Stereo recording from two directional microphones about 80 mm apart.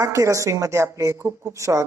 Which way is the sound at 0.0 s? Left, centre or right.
Right.